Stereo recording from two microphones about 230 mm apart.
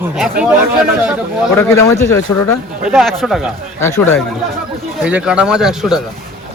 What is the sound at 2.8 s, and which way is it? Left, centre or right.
Speech, centre.